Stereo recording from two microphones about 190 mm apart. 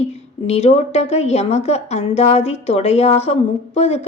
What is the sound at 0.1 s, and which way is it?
Speech, 35° left (ahead or behind).